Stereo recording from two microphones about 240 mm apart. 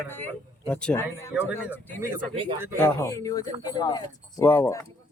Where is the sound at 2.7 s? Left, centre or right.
Centre.